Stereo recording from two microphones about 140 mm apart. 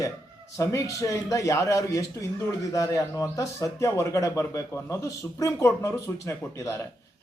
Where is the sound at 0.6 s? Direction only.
20° left (ahead or behind).